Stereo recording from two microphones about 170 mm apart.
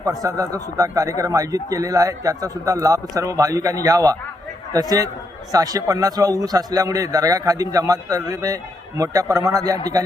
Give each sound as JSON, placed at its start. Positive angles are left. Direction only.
{"t": 0.0, "sound": "a man's voice", "side_deg": -20}